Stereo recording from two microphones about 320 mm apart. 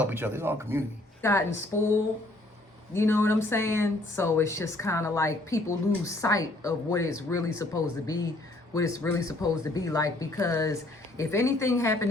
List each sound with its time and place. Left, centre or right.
0.0 s speech: centre
1.2 s speech: centre
2.9 s speech: centre